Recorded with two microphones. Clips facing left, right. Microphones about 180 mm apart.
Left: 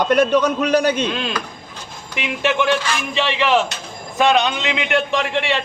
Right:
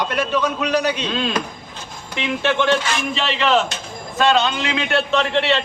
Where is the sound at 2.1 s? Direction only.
15° left (ahead or behind).